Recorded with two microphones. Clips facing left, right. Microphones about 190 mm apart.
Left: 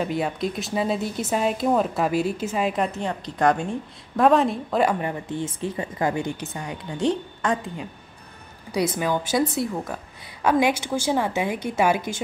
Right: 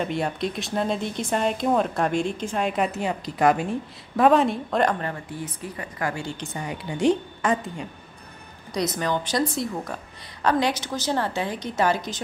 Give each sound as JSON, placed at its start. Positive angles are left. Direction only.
{"t": 0.0, "sound": "speech", "side_deg": 0}
{"t": 6.4, "sound": "speech", "side_deg": 0}